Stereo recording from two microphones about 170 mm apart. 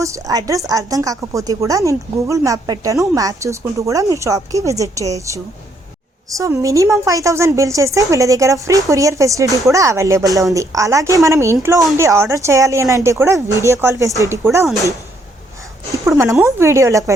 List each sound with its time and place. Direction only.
0.0 s a woman's voice: 20° right (ahead or behind)
16.0 s speech: 15° right (ahead or behind)